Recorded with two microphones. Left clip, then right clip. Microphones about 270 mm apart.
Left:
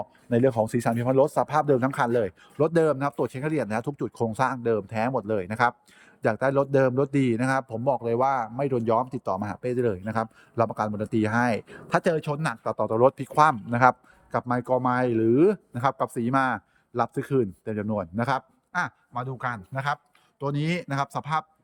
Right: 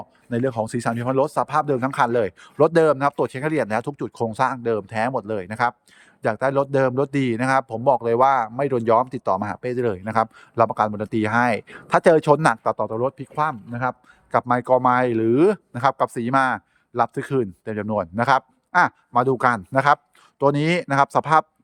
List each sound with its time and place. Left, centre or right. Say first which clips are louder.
0.3 s a man's voice: left 1 dB; centre
14.3 s a man's voice: right 7 dB; centre